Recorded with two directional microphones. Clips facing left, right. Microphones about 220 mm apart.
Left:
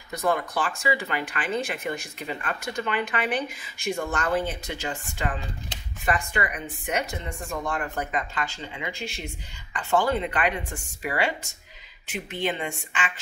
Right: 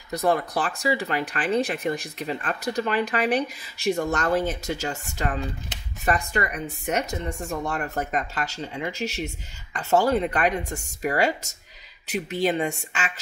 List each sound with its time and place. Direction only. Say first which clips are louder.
0.1 s speech: right 3 dB; 35° right (ahead or behind)